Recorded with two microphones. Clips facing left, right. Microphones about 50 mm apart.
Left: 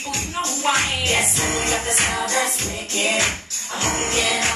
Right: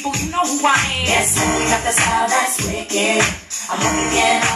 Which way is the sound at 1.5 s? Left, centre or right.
Right.